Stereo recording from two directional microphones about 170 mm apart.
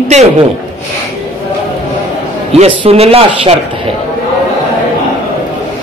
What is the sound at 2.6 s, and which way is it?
Speech, 35° right (ahead or behind).